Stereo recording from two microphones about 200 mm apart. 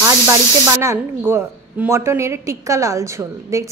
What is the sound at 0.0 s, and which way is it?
A woman's voice, 15° right (ahead or behind).